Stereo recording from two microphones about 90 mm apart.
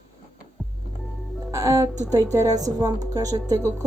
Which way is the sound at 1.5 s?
35° right (ahead or behind).